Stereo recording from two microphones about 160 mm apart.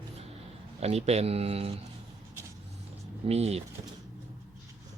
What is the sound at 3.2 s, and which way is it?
Speech, 40° right (ahead or behind).